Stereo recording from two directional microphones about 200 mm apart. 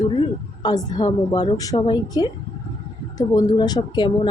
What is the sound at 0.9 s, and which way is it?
A woman's voice, 20° left (ahead or behind).